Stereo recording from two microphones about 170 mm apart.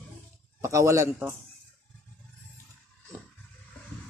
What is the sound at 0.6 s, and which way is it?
Speech, 15° right (ahead or behind).